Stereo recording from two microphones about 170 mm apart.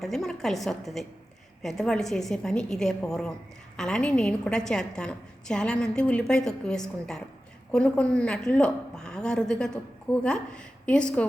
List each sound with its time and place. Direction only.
0.0 s a woman's voice: centre (ahead or behind)